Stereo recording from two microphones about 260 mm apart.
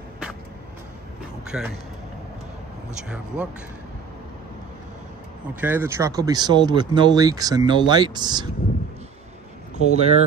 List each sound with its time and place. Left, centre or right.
1.5 s speech: centre
5.6 s speech: centre
9.8 s speech: right